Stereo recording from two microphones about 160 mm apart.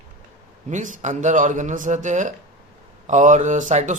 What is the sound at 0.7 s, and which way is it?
Speech, 50° right (ahead or behind).